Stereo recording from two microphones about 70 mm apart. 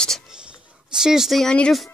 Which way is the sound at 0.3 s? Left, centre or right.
Centre.